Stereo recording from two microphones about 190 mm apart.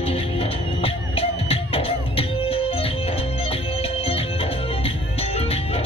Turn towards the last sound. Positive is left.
turn(degrees=30)  # may be behind; listen again after turning